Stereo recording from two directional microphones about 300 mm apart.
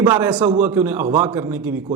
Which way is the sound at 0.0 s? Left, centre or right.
Centre.